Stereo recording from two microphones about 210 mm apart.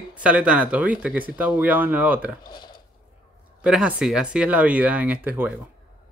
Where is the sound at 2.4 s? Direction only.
20° left (ahead or behind).